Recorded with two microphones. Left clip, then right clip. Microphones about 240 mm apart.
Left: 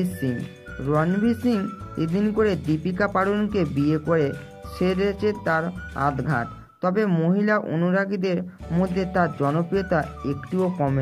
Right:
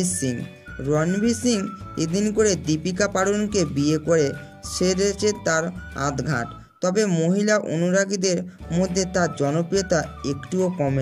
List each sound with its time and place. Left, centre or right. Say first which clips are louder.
0.0 s speech: right 1 dB; right